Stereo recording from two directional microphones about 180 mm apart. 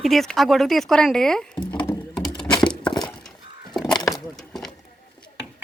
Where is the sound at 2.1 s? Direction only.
5° left (ahead or behind).